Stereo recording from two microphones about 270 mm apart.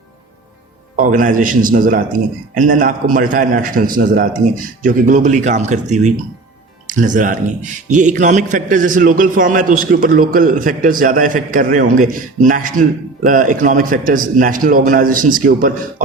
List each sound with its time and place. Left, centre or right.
0.9 s a man's voice: right